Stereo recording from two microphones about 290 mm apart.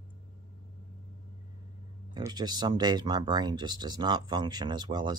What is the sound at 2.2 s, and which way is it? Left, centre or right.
Speech, centre.